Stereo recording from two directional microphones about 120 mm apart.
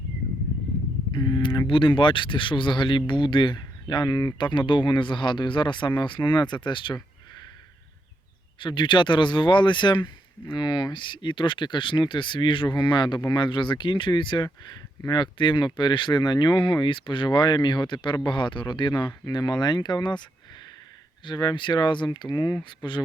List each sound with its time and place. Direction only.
1.1 s speech: 40° left (ahead or behind)
8.5 s speech: 40° left (ahead or behind)
21.2 s speech: 40° left (ahead or behind)